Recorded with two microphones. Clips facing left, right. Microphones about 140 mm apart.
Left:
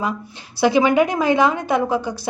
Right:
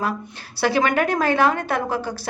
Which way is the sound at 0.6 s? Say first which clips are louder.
Left 4 dB; 15° left (ahead or behind).